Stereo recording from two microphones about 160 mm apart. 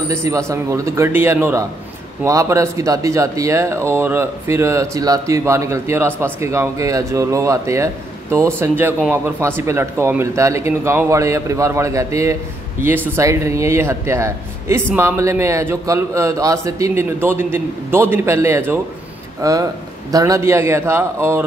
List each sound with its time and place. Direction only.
0.1 s a man's voice: 15° right (ahead or behind)